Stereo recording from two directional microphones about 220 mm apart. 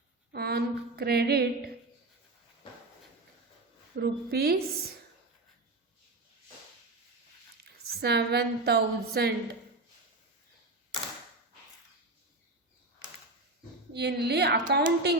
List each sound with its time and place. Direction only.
0.3 s a woman's voice: 45° right (ahead or behind)
3.9 s a woman's voice: 45° right (ahead or behind)
8.0 s a woman's voice: 50° right (ahead or behind)
13.9 s a woman's voice: 50° right (ahead or behind)